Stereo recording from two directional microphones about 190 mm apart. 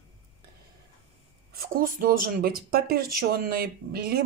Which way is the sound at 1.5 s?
50° right (ahead or behind).